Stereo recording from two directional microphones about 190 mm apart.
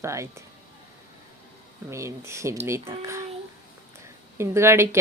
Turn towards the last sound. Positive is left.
turn(degrees=-15)  # may be behind; listen again after turning